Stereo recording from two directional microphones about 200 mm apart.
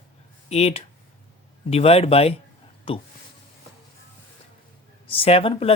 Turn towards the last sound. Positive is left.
turn(degrees=30)  # may be behind; listen again after turning